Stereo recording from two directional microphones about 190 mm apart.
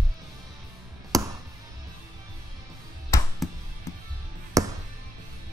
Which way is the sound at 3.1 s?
15° left (ahead or behind).